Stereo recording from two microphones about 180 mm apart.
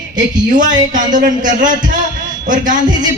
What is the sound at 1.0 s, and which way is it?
A man's voice, 45° right (ahead or behind).